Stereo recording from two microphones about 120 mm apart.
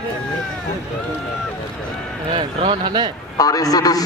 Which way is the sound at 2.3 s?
50° right (ahead or behind).